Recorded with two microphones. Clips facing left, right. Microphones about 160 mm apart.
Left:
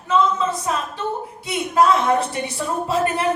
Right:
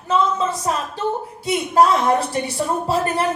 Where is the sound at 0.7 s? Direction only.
40° right (ahead or behind).